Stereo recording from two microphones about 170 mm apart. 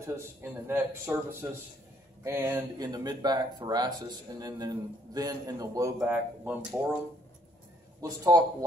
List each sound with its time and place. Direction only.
0.0 s a man's voice: 15° right (ahead or behind)
2.2 s speech: 15° right (ahead or behind)
8.0 s speech: 20° right (ahead or behind)